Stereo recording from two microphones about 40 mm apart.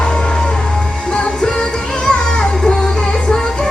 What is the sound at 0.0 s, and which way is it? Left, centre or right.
Music, left.